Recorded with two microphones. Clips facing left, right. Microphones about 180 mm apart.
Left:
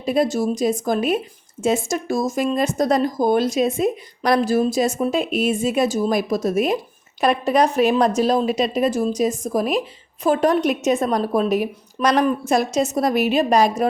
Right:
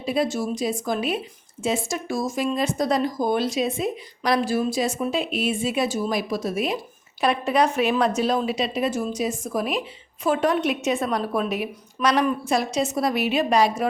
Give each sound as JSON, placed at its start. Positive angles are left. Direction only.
{"t": 0.0, "sound": "a woman's voice", "side_deg": 45}